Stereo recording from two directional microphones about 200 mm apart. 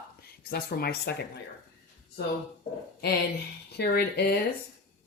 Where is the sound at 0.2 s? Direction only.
50° left (ahead or behind).